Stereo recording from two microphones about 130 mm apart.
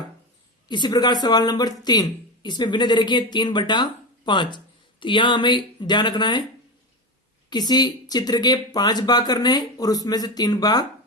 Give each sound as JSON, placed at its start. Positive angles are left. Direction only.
{"t": 0.7, "sound": "speech", "side_deg": 35}
{"t": 7.5, "sound": "speech", "side_deg": 35}